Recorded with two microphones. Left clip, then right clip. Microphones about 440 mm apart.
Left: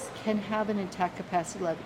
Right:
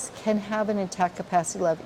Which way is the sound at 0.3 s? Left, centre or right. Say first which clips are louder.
Right 4 dB; right.